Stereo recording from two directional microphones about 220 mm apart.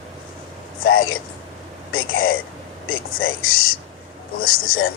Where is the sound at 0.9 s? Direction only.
65° left (ahead or behind).